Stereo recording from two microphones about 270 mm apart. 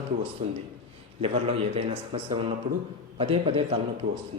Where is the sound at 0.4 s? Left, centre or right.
Right.